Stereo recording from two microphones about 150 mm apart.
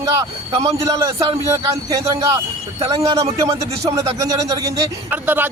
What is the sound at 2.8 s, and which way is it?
Speech, 25° right (ahead or behind).